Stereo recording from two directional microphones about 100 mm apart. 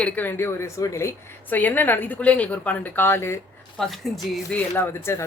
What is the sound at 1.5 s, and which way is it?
Speech, 20° left (ahead or behind).